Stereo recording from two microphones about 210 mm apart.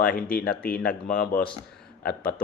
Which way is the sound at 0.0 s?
45° left (ahead or behind).